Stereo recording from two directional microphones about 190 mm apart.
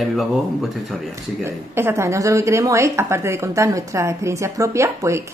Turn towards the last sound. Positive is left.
turn(degrees=-15)  # may be behind; listen again after turning